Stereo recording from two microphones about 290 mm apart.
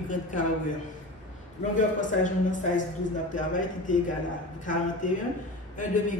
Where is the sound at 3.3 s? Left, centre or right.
Left.